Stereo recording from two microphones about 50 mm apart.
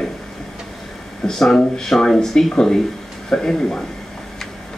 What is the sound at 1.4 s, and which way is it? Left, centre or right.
Speech, centre.